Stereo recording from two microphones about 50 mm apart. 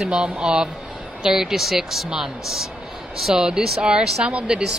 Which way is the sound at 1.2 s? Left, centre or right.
Centre.